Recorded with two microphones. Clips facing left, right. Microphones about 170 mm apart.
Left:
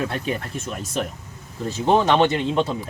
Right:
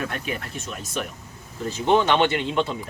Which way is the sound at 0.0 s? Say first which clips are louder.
Left 4 dB; 30° left (ahead or behind).